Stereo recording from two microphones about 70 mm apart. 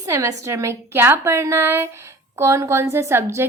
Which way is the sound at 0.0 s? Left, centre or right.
Right.